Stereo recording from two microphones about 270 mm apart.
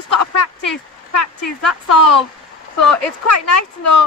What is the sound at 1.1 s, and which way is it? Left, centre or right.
Speech, left.